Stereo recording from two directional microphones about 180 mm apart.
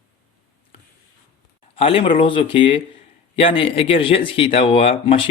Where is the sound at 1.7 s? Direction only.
30° left (ahead or behind).